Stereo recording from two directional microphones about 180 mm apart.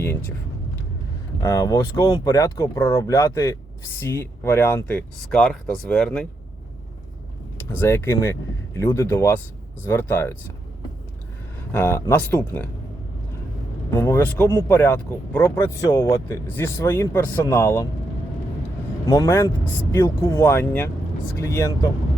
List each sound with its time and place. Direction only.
1.4 s speech: 15° left (ahead or behind)
7.6 s speech: 10° left (ahead or behind)
11.8 s speech: 15° left (ahead or behind)
13.9 s speech: 15° left (ahead or behind)
19.0 s speech: 15° left (ahead or behind)